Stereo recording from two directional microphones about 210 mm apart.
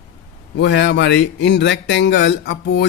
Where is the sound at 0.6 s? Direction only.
55° left (ahead or behind).